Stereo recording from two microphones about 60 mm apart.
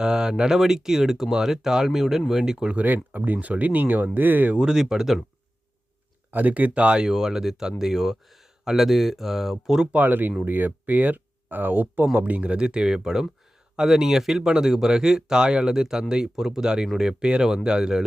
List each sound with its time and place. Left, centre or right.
0.0 s speech: centre
2.8 s speech: right
4.5 s speech: centre
6.3 s speech: right; by 9.9 s centre
9.9 s speech: right; by 18.0 s centre